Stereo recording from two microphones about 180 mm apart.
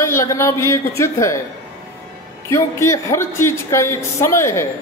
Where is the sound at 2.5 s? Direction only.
15° left (ahead or behind).